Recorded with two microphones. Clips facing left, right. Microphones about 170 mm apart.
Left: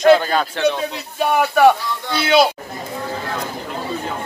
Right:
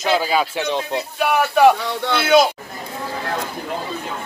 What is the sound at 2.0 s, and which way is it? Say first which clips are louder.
Speech: right 2 dB; 65° right (ahead or behind).